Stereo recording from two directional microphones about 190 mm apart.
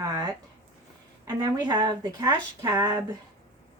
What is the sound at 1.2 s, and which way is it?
Speech, 20° right (ahead or behind).